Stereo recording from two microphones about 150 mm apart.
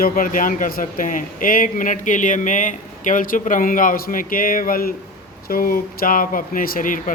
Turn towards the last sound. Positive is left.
turn(degrees=65)  # may be behind; listen again after turning